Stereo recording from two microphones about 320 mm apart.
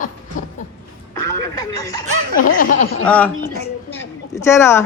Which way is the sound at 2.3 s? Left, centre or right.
Left.